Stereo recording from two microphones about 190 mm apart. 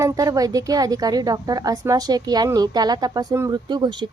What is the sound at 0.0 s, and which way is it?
Speech, 15° right (ahead or behind).